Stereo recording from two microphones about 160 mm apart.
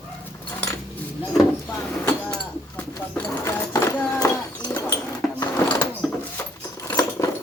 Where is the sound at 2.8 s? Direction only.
15° left (ahead or behind).